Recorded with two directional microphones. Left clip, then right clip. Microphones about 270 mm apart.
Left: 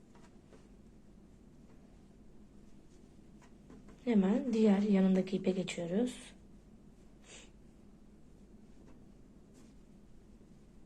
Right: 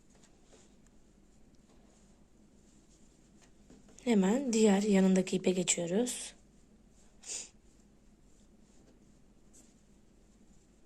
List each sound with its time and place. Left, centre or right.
4.0 s speech: right